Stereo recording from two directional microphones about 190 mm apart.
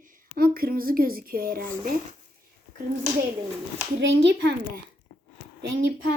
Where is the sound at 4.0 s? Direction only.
70° right (ahead or behind).